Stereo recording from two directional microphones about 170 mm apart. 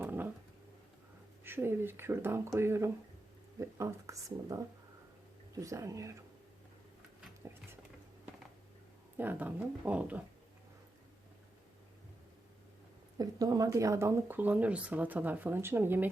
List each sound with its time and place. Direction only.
0.0 s a sound: 10° right (ahead or behind)
1.5 s speech: 15° right (ahead or behind)
9.1 s speech: 10° right (ahead or behind)
13.1 s speech: 20° right (ahead or behind)